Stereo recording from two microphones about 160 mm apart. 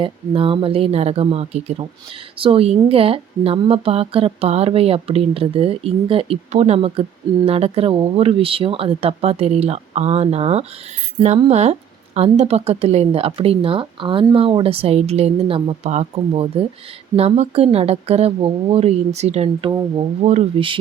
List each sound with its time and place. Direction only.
0.0 s speech: 35° right (ahead or behind)